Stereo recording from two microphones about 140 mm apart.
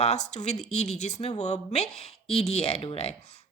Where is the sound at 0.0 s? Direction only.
50° left (ahead or behind).